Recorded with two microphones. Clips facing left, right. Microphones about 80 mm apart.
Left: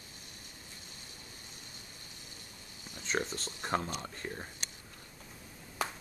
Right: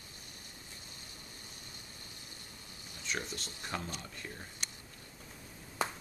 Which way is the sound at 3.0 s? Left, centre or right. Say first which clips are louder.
Left 5 dB; left.